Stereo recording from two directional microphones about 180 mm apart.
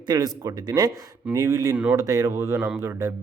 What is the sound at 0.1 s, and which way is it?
Speech, 20° right (ahead or behind).